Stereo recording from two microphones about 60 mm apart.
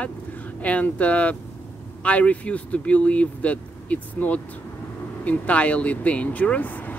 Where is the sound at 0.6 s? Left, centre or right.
Left.